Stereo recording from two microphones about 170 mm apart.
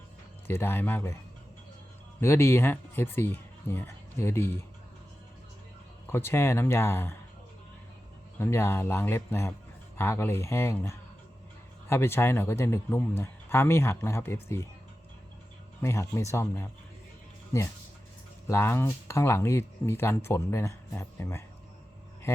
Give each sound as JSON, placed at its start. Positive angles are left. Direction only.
{"t": 0.4, "sound": "speech", "side_deg": 15}
{"t": 2.2, "sound": "speech", "side_deg": 15}
{"t": 6.1, "sound": "speech", "side_deg": 15}
{"t": 8.4, "sound": "speech", "side_deg": 15}
{"t": 15.8, "sound": "speech", "side_deg": 15}
{"t": 18.4, "sound": "speech", "side_deg": 15}